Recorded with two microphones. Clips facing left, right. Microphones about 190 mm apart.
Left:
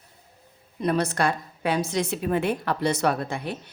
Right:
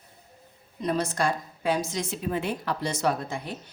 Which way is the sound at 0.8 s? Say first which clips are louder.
Left 3 dB; 65° left (ahead or behind).